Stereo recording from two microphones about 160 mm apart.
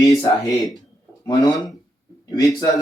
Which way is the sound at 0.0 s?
20° left (ahead or behind).